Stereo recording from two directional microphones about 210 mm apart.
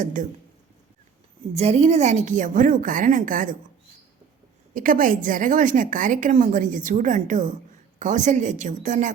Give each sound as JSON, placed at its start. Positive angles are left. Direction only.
{"t": 0.0, "sound": "a woman's voice", "side_deg": -40}
{"t": 1.5, "sound": "a woman's voice", "side_deg": -30}
{"t": 4.7, "sound": "a woman's voice", "side_deg": -40}